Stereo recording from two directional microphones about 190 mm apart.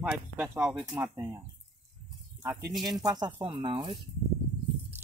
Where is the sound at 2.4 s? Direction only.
10° right (ahead or behind); by 4.0 s 25° right (ahead or behind).